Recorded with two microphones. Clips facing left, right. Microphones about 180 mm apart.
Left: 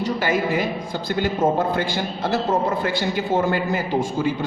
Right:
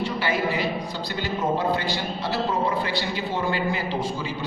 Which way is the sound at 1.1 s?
50° left (ahead or behind).